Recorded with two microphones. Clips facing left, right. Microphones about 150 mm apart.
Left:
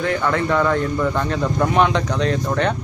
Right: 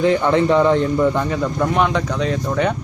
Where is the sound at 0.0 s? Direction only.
20° right (ahead or behind).